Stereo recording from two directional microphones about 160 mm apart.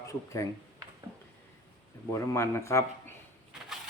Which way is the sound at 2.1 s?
15° left (ahead or behind).